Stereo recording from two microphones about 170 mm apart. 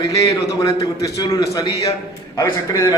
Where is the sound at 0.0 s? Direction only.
20° left (ahead or behind).